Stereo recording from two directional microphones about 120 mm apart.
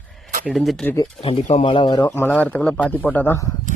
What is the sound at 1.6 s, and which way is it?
Speech, 45° left (ahead or behind).